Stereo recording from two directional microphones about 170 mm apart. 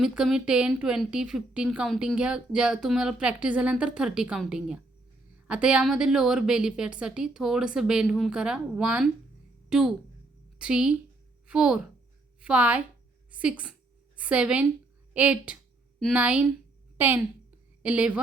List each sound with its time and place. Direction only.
0.0 s a woman's voice: 5° right (ahead or behind)